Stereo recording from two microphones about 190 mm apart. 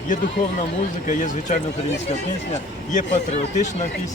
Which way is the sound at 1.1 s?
40° left (ahead or behind).